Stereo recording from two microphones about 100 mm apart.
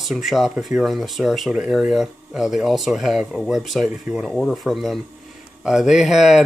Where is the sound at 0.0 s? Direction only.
Centre (ahead or behind).